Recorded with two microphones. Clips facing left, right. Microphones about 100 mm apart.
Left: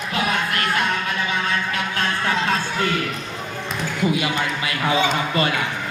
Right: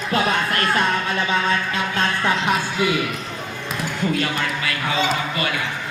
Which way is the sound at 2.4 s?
15° right (ahead or behind).